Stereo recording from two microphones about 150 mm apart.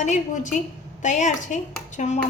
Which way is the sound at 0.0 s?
55° left (ahead or behind).